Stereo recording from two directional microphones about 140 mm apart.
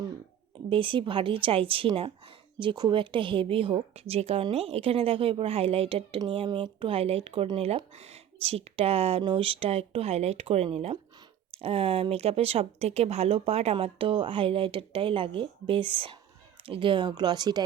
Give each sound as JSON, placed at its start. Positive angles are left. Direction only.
{"t": 0.7, "sound": "speech", "side_deg": -40}